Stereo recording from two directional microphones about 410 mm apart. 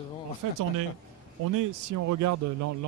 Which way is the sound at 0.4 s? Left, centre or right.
Right.